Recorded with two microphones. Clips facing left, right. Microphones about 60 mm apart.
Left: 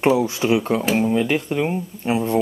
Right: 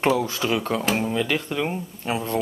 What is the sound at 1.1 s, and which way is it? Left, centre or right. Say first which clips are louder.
Speech: left 4 dB; left.